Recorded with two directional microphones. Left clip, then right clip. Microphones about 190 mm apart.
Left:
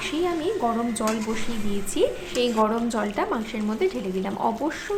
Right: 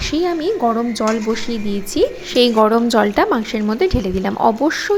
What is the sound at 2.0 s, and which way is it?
Speech, 30° right (ahead or behind).